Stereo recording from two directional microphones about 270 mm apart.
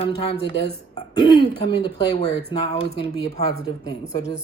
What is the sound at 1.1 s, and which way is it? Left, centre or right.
Speech, centre.